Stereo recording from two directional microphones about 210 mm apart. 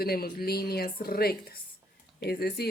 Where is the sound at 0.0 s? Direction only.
45° left (ahead or behind).